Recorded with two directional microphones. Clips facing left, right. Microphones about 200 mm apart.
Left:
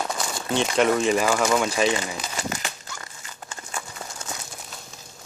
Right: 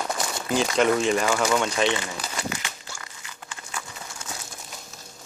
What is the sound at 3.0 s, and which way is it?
Crumpling, 40° left (ahead or behind).